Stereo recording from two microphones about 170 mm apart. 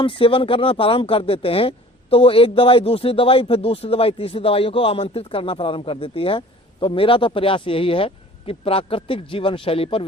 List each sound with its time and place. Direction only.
0.0 s speech: 30° left (ahead or behind)